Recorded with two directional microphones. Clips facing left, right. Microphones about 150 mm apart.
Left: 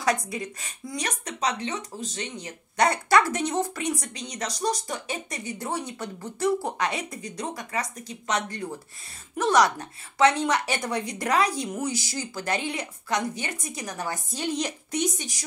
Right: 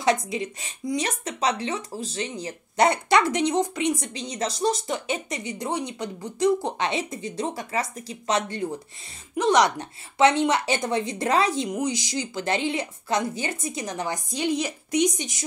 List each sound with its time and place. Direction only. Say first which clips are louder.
0.0 s speech: right 3 dB; 25° right (ahead or behind)